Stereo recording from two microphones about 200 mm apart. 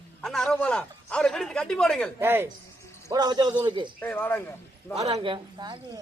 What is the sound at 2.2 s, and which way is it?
Speech, 10° right (ahead or behind).